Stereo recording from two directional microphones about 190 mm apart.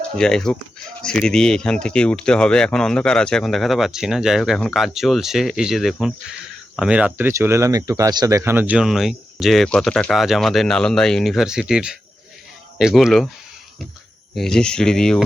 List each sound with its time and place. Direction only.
0.2 s speech: 5° left (ahead or behind)
14.3 s speech: 5° left (ahead or behind)